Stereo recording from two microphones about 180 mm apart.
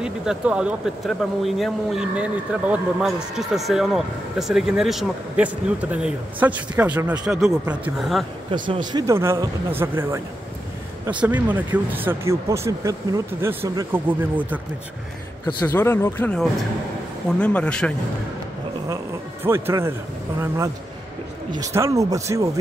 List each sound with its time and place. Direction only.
0.0 s speech: 5° right (ahead or behind)
8.6 s speech: 25° right (ahead or behind); by 14.6 s 10° right (ahead or behind)
15.6 s speech: 15° left (ahead or behind)
19.4 s speech: 15° right (ahead or behind)